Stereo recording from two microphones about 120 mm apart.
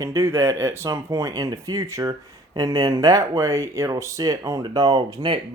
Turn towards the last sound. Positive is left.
turn(degrees=-35)  # may be behind; listen again after turning